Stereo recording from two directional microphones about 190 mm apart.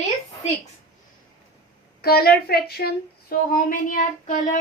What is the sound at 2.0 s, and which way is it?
A woman's voice, 55° left (ahead or behind).